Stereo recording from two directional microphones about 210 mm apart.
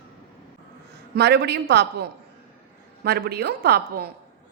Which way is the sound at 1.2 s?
55° right (ahead or behind).